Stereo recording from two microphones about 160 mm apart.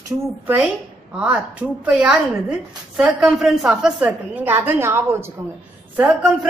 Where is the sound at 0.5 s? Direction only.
5° right (ahead or behind).